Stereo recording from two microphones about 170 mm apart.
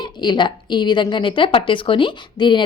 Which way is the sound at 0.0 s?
25° left (ahead or behind).